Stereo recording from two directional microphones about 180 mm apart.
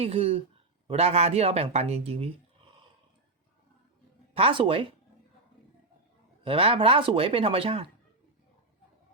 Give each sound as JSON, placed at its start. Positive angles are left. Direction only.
{"t": 0.0, "sound": "speech", "side_deg": -35}
{"t": 4.4, "sound": "speech", "side_deg": -30}
{"t": 6.4, "sound": "speech", "side_deg": -30}